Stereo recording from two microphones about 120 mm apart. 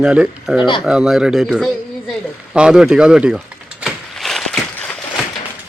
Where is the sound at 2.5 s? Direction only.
5° right (ahead or behind).